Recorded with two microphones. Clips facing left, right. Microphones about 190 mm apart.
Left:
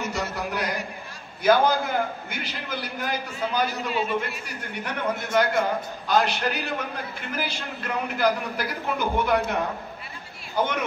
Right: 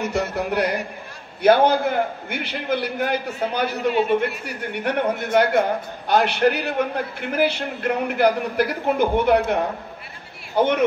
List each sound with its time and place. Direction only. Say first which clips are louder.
0.0 s a man's voice: right 6 dB; 60° right (ahead or behind)